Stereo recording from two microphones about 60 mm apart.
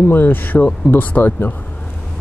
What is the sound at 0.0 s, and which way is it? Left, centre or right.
Speech, left.